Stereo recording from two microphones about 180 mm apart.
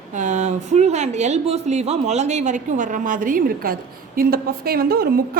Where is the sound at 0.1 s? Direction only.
40° right (ahead or behind).